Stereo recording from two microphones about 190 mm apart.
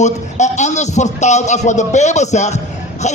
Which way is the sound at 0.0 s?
35° left (ahead or behind).